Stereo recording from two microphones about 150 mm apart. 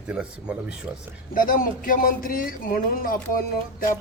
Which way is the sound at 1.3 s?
65° left (ahead or behind).